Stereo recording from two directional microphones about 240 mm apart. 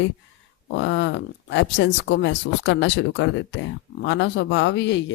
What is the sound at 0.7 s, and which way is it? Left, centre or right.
Speech, left.